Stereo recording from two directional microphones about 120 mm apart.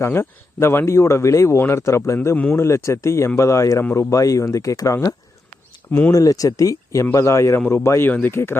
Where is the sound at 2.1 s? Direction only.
15° left (ahead or behind).